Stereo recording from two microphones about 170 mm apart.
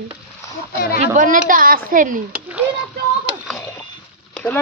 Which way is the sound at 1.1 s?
50° right (ahead or behind).